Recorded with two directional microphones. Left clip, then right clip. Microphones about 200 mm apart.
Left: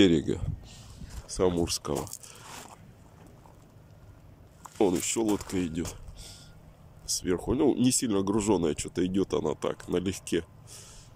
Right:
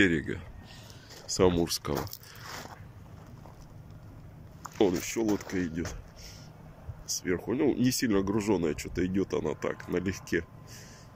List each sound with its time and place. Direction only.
0.0 s speech: 15° left (ahead or behind)
1.2 s speech: 5° right (ahead or behind)
4.7 s speech: 10° left (ahead or behind)
7.1 s speech: 10° left (ahead or behind)